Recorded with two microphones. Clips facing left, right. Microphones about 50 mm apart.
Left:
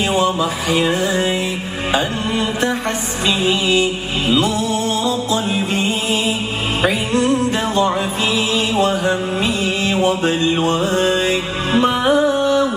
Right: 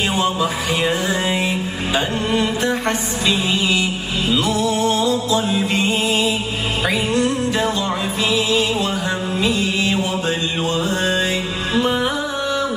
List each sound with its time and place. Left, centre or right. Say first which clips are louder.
0.4 s music: left 2 dB; left
1.1 s music: left 2 dB; right
2.0 s music: right 1 dB; left
4.3 s music: left 2 dB; left
7.2 s music: left 2 dB; left